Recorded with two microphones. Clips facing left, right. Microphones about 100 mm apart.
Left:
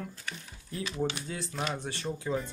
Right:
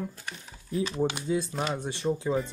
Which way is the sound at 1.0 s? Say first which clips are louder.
Right 4 dB; 15° right (ahead or behind).